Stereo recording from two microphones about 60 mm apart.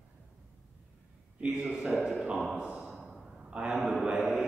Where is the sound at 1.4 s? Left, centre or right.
Centre.